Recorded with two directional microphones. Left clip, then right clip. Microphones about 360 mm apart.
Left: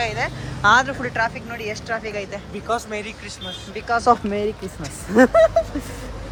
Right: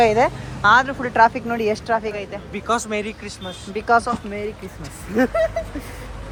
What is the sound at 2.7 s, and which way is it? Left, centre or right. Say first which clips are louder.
Speech: right 3 dB; right.